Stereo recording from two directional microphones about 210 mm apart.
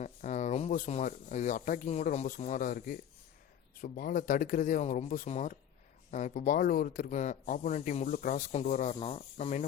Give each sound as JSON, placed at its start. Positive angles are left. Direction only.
{"t": 0.0, "sound": "speech", "side_deg": 35}